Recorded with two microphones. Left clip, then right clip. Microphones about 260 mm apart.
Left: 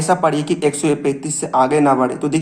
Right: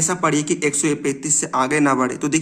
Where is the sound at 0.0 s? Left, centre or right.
Centre.